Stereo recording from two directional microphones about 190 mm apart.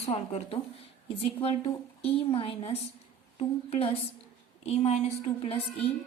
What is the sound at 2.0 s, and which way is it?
A woman's voice, 30° left (ahead or behind).